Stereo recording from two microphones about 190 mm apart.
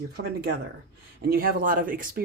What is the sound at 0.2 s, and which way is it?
Speech, 60° right (ahead or behind).